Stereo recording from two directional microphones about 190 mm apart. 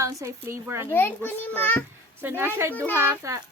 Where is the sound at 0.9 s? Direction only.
10° left (ahead or behind).